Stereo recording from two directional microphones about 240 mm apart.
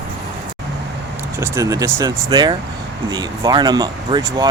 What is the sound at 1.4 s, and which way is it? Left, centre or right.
Speech, centre.